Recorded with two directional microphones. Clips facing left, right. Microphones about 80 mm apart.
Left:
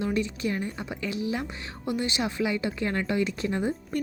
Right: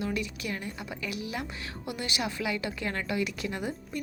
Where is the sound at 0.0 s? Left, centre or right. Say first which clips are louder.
Left 5 dB; left.